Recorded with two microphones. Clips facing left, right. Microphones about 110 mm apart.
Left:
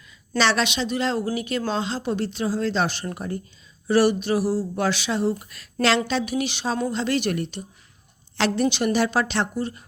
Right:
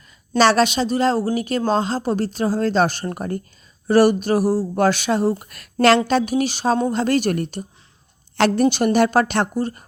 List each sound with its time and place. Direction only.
0.3 s a woman's voice: 45° right (ahead or behind)